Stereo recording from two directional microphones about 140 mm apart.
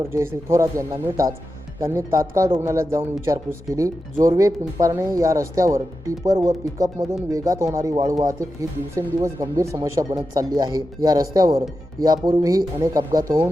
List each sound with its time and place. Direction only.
0.0 s speech: 20° right (ahead or behind)